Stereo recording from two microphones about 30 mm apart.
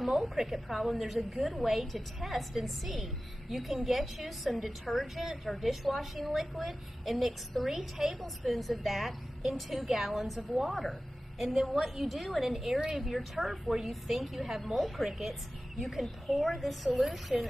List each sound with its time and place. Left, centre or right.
0.1 s a woman's voice: centre
8.2 s a woman's voice: centre
12.5 s a woman's voice: centre